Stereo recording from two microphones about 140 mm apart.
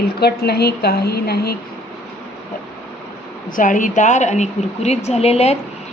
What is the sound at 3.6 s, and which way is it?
A woman's voice, 65° left (ahead or behind).